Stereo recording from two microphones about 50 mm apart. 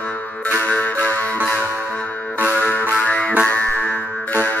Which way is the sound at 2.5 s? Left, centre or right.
Left.